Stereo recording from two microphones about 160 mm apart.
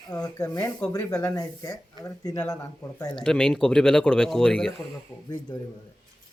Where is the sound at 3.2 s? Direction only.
5° left (ahead or behind).